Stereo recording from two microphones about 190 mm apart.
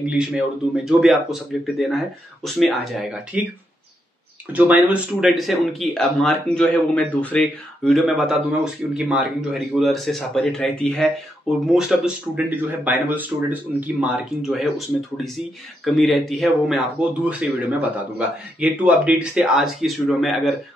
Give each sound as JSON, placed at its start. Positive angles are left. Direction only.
{"t": 0.0, "sound": "speech", "side_deg": -5}
{"t": 4.5, "sound": "a man's voice", "side_deg": -10}
{"t": 15.8, "sound": "speech", "side_deg": 0}